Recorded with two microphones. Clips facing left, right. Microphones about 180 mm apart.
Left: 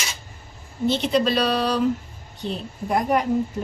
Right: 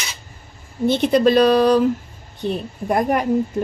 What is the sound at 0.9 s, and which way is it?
Speech, 55° right (ahead or behind).